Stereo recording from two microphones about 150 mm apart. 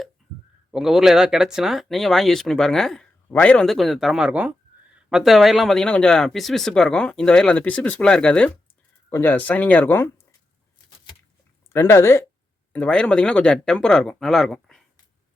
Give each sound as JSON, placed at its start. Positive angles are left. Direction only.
{"t": 0.7, "sound": "speech", "side_deg": -5}
{"t": 11.7, "sound": "speech", "side_deg": 15}